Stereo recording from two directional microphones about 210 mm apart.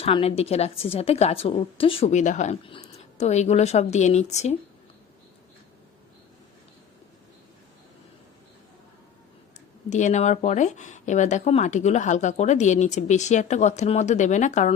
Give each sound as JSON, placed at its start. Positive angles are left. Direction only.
{"t": 0.0, "sound": "speech", "side_deg": 25}
{"t": 9.9, "sound": "speech", "side_deg": 35}